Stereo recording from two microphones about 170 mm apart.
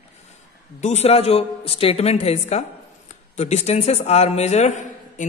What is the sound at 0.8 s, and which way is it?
A man's voice, 40° left (ahead or behind).